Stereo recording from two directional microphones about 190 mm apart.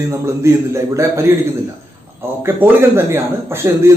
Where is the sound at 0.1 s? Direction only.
15° right (ahead or behind).